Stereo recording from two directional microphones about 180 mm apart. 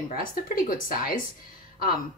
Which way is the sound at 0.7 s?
50° left (ahead or behind).